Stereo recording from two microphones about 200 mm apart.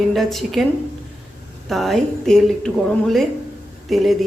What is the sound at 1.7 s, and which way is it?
A woman's voice, centre (ahead or behind).